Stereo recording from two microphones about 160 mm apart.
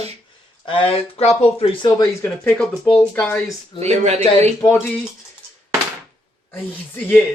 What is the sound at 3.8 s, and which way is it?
Speech, 40° right (ahead or behind).